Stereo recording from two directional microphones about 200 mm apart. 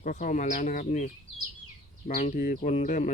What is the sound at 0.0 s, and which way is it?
Speech, 40° left (ahead or behind).